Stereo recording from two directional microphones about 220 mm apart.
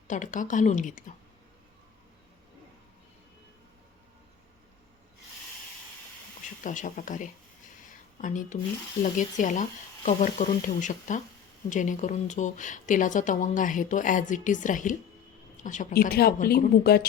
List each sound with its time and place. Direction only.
0.1 s a woman's voice: 35° left (ahead or behind)
6.6 s a woman's voice: 35° left (ahead or behind)